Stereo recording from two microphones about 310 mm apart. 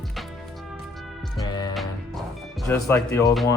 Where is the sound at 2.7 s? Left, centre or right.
Centre.